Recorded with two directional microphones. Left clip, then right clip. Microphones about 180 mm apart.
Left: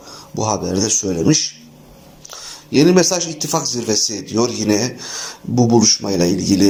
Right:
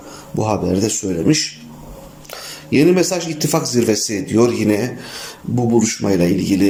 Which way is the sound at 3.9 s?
30° right (ahead or behind).